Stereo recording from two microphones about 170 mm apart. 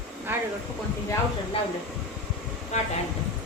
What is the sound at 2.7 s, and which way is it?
Speech, 40° left (ahead or behind).